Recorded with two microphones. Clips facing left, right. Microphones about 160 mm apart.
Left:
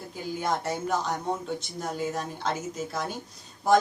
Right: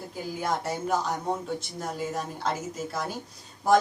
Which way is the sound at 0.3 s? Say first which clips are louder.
Left 1 dB; 5° right (ahead or behind).